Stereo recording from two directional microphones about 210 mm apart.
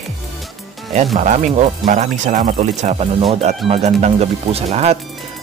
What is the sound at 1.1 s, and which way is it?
Speech, 35° right (ahead or behind).